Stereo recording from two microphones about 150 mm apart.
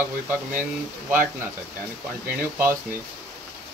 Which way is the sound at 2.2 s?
15° right (ahead or behind).